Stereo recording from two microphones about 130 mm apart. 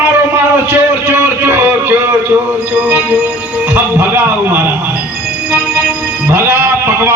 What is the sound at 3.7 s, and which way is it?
Speech, 15° right (ahead or behind).